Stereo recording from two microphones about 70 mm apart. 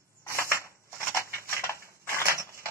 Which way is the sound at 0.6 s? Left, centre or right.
Left.